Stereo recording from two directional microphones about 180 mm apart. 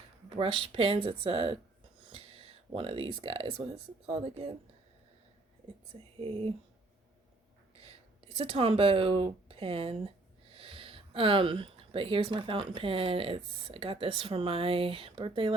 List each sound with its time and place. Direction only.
0.3 s speech: 30° right (ahead or behind)
6.1 s speech: 30° right (ahead or behind)
8.4 s speech: 30° right (ahead or behind)